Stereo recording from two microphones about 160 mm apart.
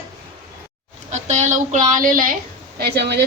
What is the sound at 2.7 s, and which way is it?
Speech, 90° right.